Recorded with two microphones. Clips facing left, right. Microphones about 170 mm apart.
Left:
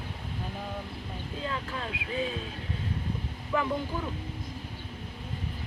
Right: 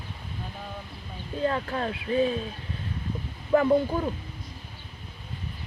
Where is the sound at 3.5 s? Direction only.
45° right (ahead or behind).